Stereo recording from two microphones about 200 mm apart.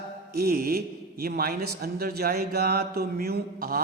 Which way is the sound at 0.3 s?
50° right (ahead or behind).